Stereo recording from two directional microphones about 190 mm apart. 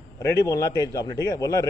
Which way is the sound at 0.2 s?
15° left (ahead or behind).